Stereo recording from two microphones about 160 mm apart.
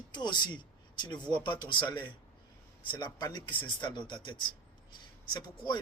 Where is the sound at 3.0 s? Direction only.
25° left (ahead or behind).